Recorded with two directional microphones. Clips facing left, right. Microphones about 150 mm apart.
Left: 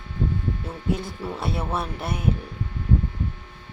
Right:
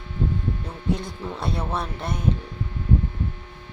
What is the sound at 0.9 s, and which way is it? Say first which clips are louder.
Speech: left 1 dB; 5° left (ahead or behind).